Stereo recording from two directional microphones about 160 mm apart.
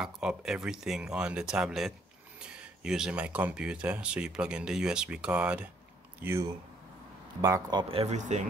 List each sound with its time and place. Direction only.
0.0 s speech: 5° right (ahead or behind)
7.4 s speech: 20° right (ahead or behind)
7.9 s speech: 40° right (ahead or behind)